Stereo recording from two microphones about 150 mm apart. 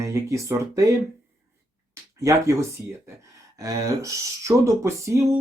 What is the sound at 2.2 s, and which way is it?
Speech, 20° right (ahead or behind).